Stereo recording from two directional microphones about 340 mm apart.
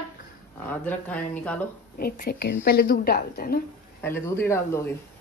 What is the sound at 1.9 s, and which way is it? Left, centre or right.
A woman's voice, left.